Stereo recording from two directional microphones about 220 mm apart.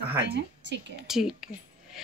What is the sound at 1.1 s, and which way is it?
Speech, centre (ahead or behind).